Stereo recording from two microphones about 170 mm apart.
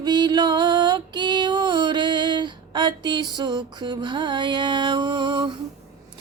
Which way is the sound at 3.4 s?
25° right (ahead or behind).